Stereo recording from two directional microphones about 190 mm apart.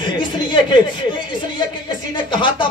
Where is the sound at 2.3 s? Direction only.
25° left (ahead or behind).